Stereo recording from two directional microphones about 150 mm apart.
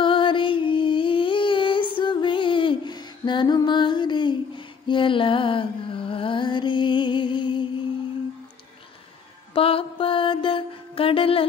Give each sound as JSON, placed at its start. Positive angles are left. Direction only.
{"t": 0.0, "sound": "a sound", "side_deg": 35}
{"t": 2.0, "sound": "female singing", "side_deg": 30}
{"t": 4.8, "sound": "music", "side_deg": 35}
{"t": 9.5, "sound": "mantra", "side_deg": 40}